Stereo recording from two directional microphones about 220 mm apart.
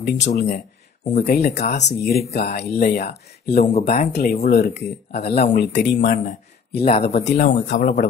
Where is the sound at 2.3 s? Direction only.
35° left (ahead or behind).